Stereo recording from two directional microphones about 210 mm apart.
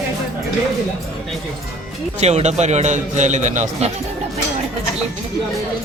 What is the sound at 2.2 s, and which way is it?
A man's voice, 30° right (ahead or behind).